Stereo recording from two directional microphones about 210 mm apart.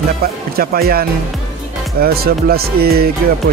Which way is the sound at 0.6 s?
45° right (ahead or behind).